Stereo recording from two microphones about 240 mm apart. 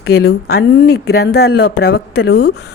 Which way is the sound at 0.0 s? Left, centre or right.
Left.